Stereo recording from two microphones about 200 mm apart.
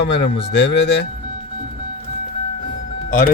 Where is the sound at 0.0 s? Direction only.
60° left (ahead or behind).